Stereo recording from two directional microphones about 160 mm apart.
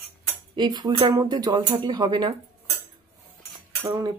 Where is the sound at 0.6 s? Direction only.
25° right (ahead or behind).